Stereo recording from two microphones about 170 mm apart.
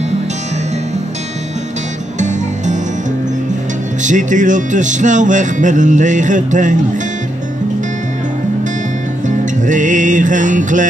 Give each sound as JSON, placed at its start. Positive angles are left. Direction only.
{"t": 2.1, "sound": "music", "side_deg": -45}
{"t": 4.0, "sound": "music", "side_deg": -45}
{"t": 9.4, "sound": "music", "side_deg": -50}